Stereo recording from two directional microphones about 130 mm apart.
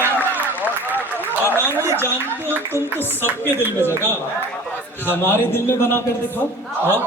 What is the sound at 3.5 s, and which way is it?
Speech, 15° right (ahead or behind).